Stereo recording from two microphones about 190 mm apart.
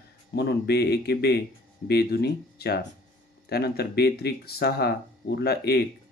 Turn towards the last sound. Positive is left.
turn(degrees=55)  # may be behind; listen again after turning